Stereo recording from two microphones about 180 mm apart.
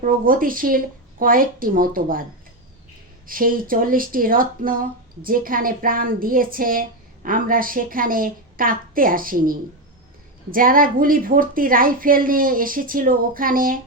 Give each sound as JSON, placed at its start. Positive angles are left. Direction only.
{"t": 0.0, "sound": "speech", "side_deg": -50}
{"t": 3.2, "sound": "speech", "side_deg": -50}